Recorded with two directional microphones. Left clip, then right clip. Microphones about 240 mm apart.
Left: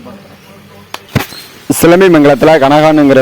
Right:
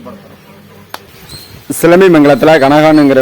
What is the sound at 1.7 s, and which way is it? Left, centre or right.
A man's voice, left.